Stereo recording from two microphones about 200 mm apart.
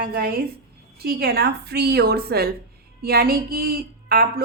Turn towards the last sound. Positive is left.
turn(degrees=-50)  # may be behind; listen again after turning